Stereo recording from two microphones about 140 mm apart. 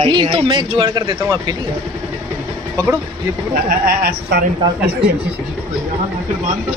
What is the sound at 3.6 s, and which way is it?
Speech, 90° right.